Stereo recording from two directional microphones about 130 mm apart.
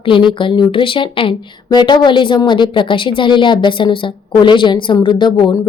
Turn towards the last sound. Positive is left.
turn(degrees=35)  # may be behind; listen again after turning